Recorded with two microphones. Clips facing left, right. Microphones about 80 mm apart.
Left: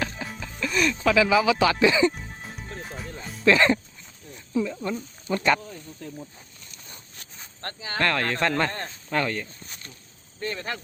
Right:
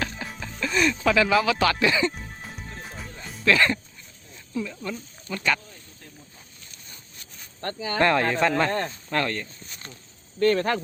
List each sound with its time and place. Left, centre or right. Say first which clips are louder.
0.0 s music: even; centre
1.0 s speech: left 2 dB; centre
3.4 s speech: left 2 dB; left
4.5 s snake: left 4 dB; centre
4.9 s speech: left 6 dB; left
7.9 s speech: right 4 dB; centre
8.4 s speech: right 3 dB; centre
10.4 s speech: right 10 dB; right